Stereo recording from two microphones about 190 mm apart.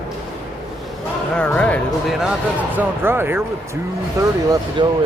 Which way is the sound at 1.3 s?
5° left (ahead or behind).